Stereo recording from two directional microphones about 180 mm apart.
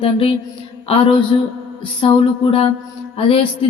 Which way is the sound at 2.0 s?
30° left (ahead or behind).